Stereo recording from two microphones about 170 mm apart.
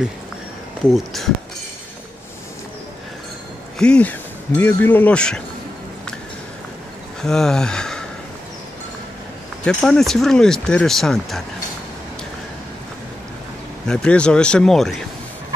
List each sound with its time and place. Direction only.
0.9 s speech: centre (ahead or behind)
3.7 s speech: 5° left (ahead or behind)
7.2 s speech: 5° left (ahead or behind)
9.7 s speech: 5° left (ahead or behind)
13.8 s speech: 5° left (ahead or behind)